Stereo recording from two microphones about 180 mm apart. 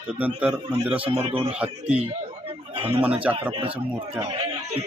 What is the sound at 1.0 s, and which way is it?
Speech, 30° right (ahead or behind).